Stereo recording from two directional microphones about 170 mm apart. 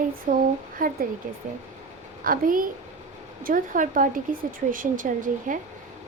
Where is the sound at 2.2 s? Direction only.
55° right (ahead or behind).